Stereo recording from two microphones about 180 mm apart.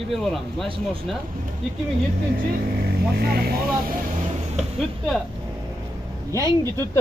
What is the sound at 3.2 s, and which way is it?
Speech, 60° right (ahead or behind).